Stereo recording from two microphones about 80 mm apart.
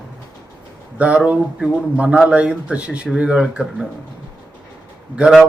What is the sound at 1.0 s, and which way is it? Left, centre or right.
Speech, centre.